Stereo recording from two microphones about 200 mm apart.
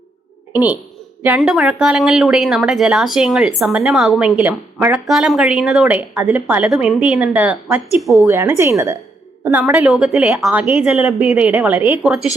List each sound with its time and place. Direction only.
0.5 s a woman's voice: 5° right (ahead or behind)
8.3 s a woman's voice: 10° right (ahead or behind)